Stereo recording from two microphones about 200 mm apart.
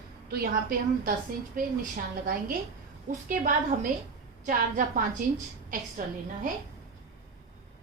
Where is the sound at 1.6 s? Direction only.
45° right (ahead or behind).